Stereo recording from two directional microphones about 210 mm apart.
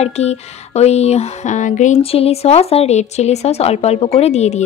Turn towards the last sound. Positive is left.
turn(degrees=30)  # may be behind; listen again after turning